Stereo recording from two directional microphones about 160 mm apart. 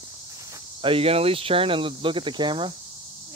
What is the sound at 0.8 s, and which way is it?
Speech, 35° right (ahead or behind).